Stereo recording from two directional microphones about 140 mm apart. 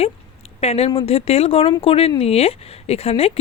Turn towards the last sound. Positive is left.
turn(degrees=45)  # may be behind; listen again after turning